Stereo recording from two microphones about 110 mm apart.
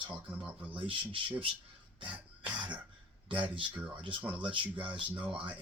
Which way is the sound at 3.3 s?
50° right (ahead or behind).